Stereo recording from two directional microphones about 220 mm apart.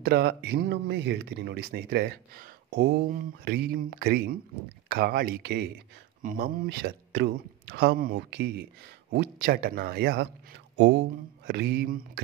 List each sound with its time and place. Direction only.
0.0 s speech: 45° right (ahead or behind)
11.4 s speech: 45° right (ahead or behind)